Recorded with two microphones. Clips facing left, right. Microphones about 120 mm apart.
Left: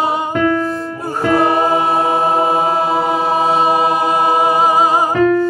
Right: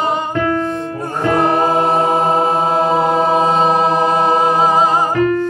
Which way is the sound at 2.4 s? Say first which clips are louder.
Even; 5° left (ahead or behind).